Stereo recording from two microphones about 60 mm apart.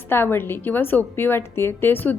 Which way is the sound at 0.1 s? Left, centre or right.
Left.